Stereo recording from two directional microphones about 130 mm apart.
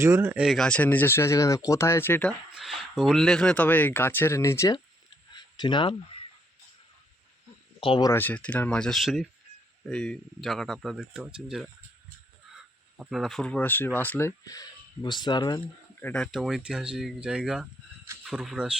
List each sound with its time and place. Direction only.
0.0 s speech: 20° right (ahead or behind)
0.4 s speech: 5° left (ahead or behind)
2.6 s speech: 5° right (ahead or behind); by 4.7 s 20° left (ahead or behind)
5.3 s a sound: 35° left (ahead or behind)
7.8 s speech: 45° left (ahead or behind)
8.1 s speech: 15° left (ahead or behind); by 11.7 s 5° right (ahead or behind)
13.0 s speech: centre (ahead or behind); by 15.6 s 35° left (ahead or behind)
16.0 s speech: 15° left (ahead or behind)
16.2 s speech: centre (ahead or behind)